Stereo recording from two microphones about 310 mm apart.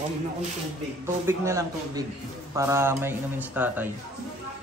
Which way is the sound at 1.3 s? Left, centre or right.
Centre.